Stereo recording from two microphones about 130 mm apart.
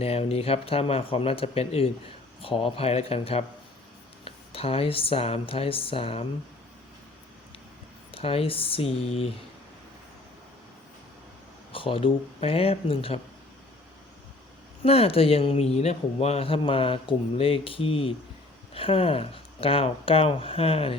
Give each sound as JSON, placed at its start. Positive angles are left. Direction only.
{"t": 0.0, "sound": "speech", "side_deg": 50}
{"t": 8.1, "sound": "speech", "side_deg": 45}
{"t": 11.7, "sound": "speech", "side_deg": 45}
{"t": 14.8, "sound": "speech", "side_deg": 50}